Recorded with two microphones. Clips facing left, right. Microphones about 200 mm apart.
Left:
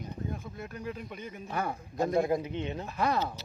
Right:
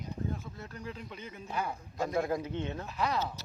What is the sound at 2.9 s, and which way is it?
Speech, 50° left (ahead or behind).